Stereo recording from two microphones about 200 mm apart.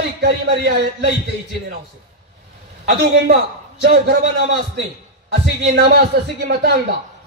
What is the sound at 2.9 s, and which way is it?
A man's voice, 50° right (ahead or behind).